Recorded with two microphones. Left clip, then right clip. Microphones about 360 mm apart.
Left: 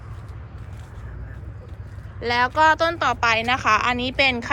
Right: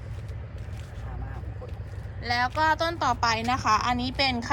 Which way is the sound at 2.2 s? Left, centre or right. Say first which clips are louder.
Left 7 dB; centre.